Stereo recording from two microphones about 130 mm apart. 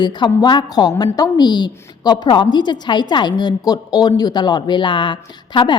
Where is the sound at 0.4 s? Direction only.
35° left (ahead or behind).